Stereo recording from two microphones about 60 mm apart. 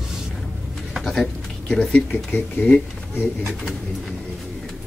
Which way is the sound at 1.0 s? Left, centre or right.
Centre.